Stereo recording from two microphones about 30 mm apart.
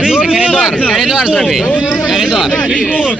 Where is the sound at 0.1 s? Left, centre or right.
Right.